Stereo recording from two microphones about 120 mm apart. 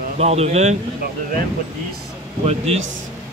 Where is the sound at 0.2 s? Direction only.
60° right (ahead or behind).